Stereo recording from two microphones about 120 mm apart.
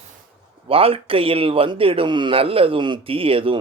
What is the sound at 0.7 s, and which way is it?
A man's voice, 50° right (ahead or behind).